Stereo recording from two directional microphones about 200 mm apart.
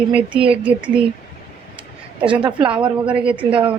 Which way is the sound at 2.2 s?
25° right (ahead or behind).